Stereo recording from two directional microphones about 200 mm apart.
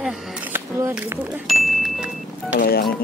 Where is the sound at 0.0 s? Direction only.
10° right (ahead or behind).